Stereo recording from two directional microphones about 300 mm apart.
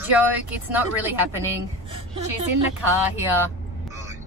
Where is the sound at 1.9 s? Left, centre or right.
Centre.